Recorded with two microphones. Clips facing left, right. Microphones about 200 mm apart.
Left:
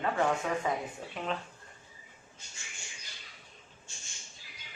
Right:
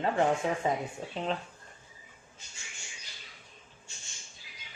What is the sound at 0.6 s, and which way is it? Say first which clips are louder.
Speech: right 2 dB; 25° right (ahead or behind).